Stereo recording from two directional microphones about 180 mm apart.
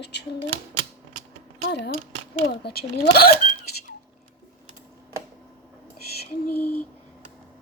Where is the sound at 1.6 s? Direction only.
70° left (ahead or behind).